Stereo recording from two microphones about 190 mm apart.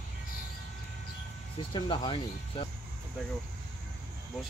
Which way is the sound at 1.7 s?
25° left (ahead or behind).